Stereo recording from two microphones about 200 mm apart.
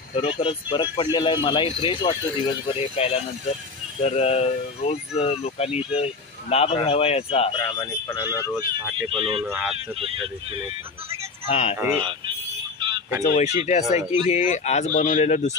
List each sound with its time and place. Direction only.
0.1 s speech: 25° left (ahead or behind)
7.8 s speech: 20° left (ahead or behind)
9.1 s speech: 25° right (ahead or behind)
9.5 s speech: 10° right (ahead or behind)
9.9 s speech: 30° right (ahead or behind)
11.4 s speech: 35° left (ahead or behind)
13.2 s speech: 35° left (ahead or behind)